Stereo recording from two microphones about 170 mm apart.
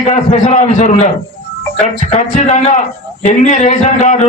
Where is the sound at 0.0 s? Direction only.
40° left (ahead or behind).